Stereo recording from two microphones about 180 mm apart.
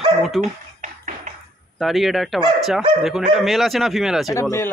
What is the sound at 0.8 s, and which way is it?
Tap, 45° right (ahead or behind).